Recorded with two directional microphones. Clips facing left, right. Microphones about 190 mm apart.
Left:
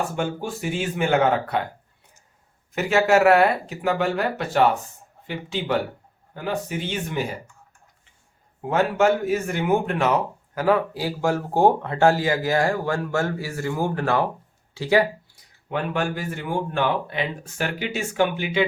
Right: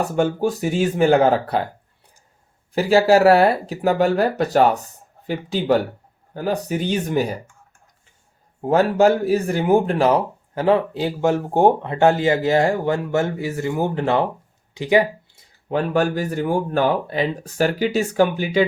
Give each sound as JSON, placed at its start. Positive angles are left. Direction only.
{"t": 0.0, "sound": "speech", "side_deg": -40}
{"t": 2.7, "sound": "speech", "side_deg": -35}
{"t": 8.6, "sound": "speech", "side_deg": -35}
{"t": 14.7, "sound": "a sound", "side_deg": -15}
{"t": 15.7, "sound": "speech", "side_deg": -40}